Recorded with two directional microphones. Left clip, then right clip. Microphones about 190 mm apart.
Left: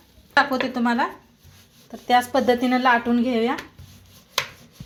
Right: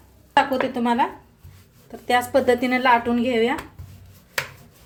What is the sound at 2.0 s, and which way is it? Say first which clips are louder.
Speech: even; 10° left (ahead or behind).